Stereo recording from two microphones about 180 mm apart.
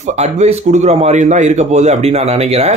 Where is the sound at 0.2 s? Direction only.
40° right (ahead or behind).